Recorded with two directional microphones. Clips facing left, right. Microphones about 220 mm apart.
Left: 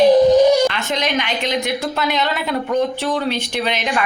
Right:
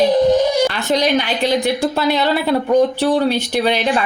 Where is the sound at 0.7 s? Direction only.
35° right (ahead or behind).